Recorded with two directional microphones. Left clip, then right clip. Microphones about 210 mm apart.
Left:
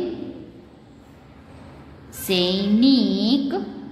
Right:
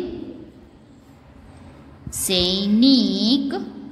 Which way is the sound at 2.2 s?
20° right (ahead or behind).